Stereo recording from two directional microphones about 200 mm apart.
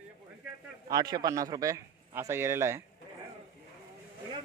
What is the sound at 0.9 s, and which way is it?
A man's voice, 20° right (ahead or behind).